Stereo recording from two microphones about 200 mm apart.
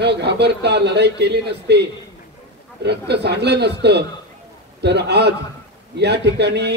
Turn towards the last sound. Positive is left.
turn(degrees=-55)  # may be behind; listen again after turning